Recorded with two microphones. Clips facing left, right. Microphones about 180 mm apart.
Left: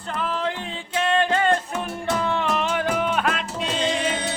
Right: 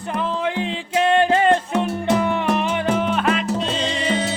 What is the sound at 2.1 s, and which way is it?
Music, 15° right (ahead or behind).